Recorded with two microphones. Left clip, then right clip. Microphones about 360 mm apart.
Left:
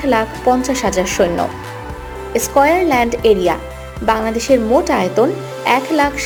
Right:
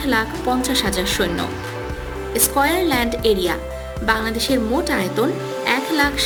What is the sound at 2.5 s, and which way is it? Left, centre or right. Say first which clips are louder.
Speech: left 6 dB; centre.